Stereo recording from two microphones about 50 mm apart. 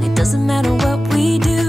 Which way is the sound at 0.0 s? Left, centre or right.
Centre.